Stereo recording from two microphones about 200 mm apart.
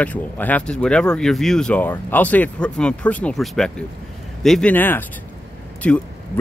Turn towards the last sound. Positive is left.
turn(degrees=5)  # may be behind; listen again after turning